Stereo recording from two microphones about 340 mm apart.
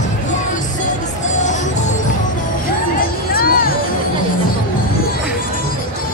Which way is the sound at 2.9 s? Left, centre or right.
Left.